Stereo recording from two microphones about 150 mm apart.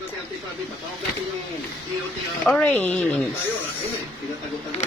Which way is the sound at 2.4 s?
10° left (ahead or behind).